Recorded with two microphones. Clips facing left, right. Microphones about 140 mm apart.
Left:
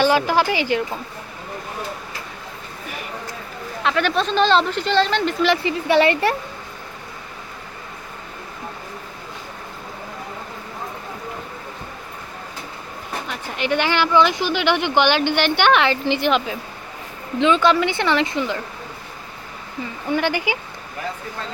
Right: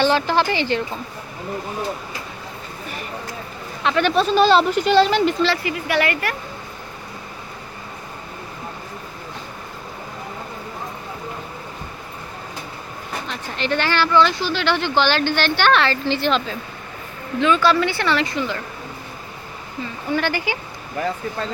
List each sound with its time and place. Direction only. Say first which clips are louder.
0.0 s speech: left 1 dB; 10° left (ahead or behind)
3.8 s speech: right 2 dB; centre (ahead or behind)
5.6 s speech: left 4 dB; 25° left (ahead or behind)
13.2 s speech: left 1 dB; 10° left (ahead or behind)
20.1 s speech: left 1 dB; 15° left (ahead or behind)